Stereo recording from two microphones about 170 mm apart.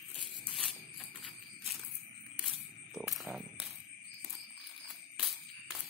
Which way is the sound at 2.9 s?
Centre (ahead or behind).